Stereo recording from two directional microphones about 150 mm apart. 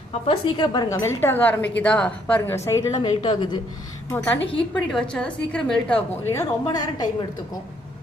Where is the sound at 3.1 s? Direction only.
35° left (ahead or behind).